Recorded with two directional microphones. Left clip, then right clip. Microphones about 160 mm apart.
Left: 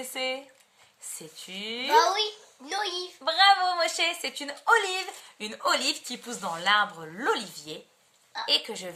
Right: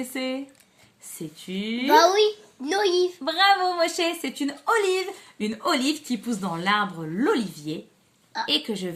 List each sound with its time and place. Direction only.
0.0 s speech: 10° left (ahead or behind)
1.5 s speech: 5° left (ahead or behind)
1.9 s a woman's voice: 55° right (ahead or behind)
3.2 s a woman's voice: centre (ahead or behind)